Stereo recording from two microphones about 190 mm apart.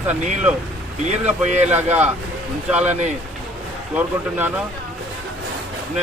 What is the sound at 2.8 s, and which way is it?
Speech, 35° right (ahead or behind).